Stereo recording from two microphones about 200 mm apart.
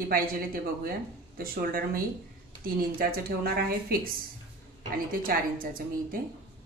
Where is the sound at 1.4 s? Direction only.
50° right (ahead or behind).